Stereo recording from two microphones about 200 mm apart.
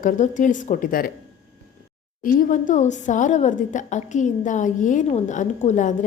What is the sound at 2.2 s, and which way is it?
A woman's voice, 40° left (ahead or behind).